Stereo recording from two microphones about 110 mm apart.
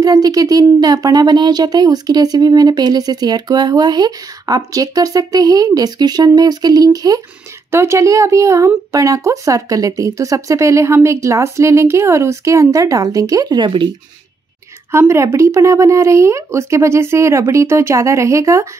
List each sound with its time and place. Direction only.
0.0 s speech: 35° right (ahead or behind)
14.9 s speech: 25° right (ahead or behind)